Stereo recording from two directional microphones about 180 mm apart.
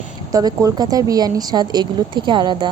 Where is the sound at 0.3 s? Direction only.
20° right (ahead or behind).